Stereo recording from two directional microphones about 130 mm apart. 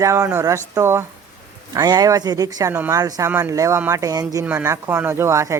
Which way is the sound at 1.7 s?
30° right (ahead or behind).